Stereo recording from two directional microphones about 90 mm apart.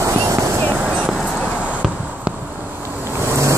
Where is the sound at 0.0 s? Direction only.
35° right (ahead or behind).